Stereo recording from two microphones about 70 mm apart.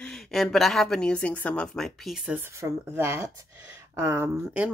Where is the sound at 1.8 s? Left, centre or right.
Centre.